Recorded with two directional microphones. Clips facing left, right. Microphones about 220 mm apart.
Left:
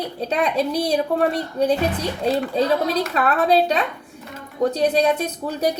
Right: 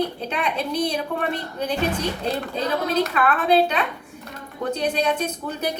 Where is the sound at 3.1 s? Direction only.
35° left (ahead or behind).